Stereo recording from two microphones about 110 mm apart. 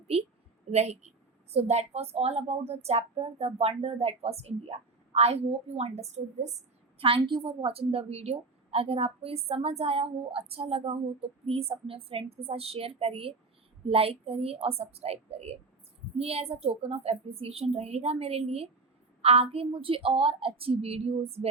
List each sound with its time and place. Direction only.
0.1 s a woman's voice: 65° right (ahead or behind)
0.7 s a woman's voice: 80° right
7.0 s a woman's voice: 50° right (ahead or behind)